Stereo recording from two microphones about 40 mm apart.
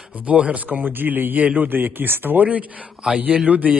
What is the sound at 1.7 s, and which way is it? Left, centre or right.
Speech, right.